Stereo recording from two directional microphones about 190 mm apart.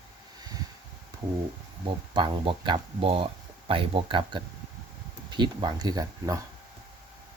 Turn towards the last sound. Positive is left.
turn(degrees=-20)  # may be behind; listen again after turning